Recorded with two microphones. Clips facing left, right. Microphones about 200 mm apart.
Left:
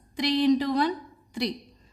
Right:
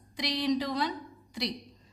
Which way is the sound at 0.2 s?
55° left (ahead or behind).